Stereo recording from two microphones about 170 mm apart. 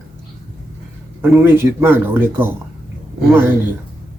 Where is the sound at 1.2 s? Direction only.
15° right (ahead or behind).